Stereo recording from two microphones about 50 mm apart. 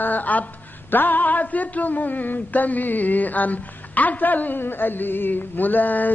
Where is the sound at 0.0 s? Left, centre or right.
Left.